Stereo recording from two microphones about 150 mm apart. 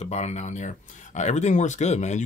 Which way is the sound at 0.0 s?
45° left (ahead or behind).